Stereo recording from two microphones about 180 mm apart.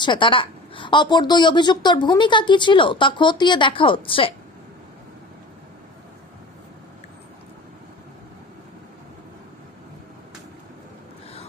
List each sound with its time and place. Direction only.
0.0 s a woman's voice: 25° left (ahead or behind)